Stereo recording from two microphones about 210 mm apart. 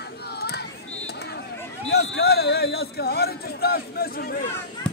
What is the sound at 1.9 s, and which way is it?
A man's voice, 50° left (ahead or behind).